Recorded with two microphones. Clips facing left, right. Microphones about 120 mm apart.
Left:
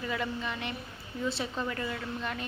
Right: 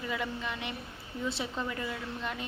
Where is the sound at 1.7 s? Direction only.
10° right (ahead or behind).